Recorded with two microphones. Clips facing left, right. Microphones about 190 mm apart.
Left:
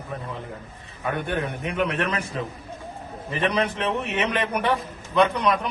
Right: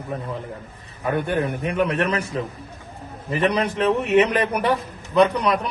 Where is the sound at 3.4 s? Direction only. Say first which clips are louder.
Right 4 dB; 35° right (ahead or behind).